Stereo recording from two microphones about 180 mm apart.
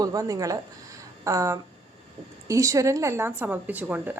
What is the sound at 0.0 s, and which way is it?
A woman's voice, 20° right (ahead or behind).